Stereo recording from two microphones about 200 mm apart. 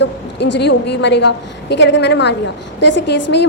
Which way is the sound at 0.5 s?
60° left (ahead or behind).